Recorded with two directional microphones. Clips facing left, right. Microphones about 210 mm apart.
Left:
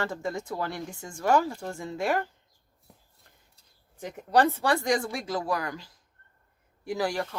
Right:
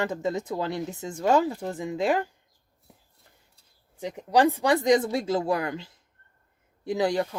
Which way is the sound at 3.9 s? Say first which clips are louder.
Right 1 dB; 15° right (ahead or behind).